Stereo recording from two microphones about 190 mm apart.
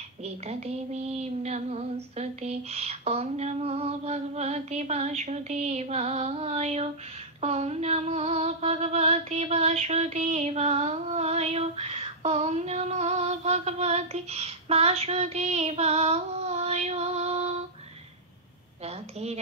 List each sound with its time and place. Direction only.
1.4 s female singing: 35° right (ahead or behind)
18.9 s a woman's voice: 35° right (ahead or behind)